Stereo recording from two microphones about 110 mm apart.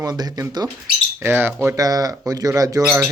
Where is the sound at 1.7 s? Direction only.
35° right (ahead or behind).